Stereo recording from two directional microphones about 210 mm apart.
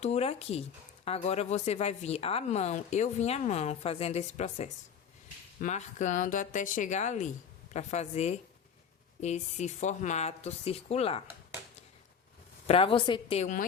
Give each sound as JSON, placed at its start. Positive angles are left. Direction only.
{"t": 0.0, "sound": "a woman's voice", "side_deg": 30}
{"t": 12.6, "sound": "a woman's voice", "side_deg": 25}